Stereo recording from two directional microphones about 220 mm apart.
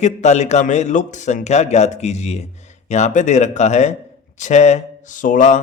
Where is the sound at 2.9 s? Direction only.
30° left (ahead or behind).